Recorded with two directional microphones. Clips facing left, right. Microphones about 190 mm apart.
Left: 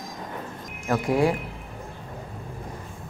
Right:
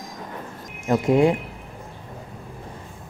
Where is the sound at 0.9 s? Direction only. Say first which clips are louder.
Right 4 dB; 20° right (ahead or behind).